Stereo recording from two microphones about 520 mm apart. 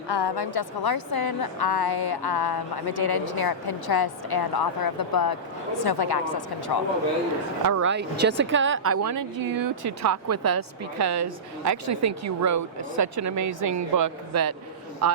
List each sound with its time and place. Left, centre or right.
0.1 s a woman's voice: left
7.8 s a woman's voice: centre